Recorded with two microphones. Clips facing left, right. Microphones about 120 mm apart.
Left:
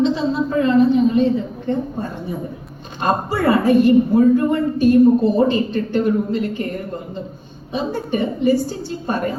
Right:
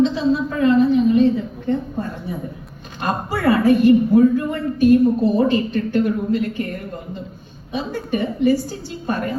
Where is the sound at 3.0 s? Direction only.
30° left (ahead or behind).